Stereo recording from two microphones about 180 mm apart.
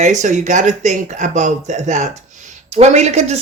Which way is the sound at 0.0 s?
40° right (ahead or behind).